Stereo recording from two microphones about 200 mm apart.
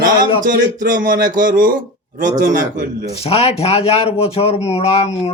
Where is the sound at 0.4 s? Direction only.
45° right (ahead or behind).